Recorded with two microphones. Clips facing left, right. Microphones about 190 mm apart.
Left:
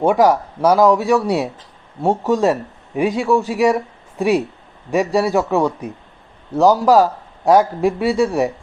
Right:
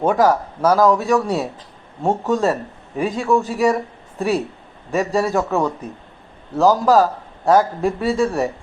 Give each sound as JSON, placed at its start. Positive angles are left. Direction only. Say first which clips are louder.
{"t": 0.0, "sound": "a man's voice", "louder": "left 2 dB", "side_deg": 15}
{"t": 4.9, "sound": "a man's voice", "louder": "left 2 dB", "side_deg": 15}